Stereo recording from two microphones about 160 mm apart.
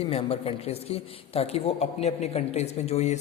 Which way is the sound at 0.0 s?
35° left (ahead or behind).